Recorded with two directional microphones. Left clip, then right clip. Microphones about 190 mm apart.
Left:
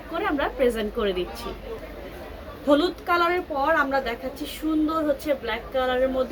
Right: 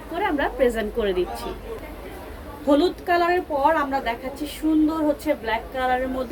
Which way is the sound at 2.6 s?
15° left (ahead or behind).